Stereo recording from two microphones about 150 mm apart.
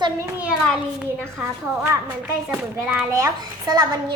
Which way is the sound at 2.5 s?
5° right (ahead or behind).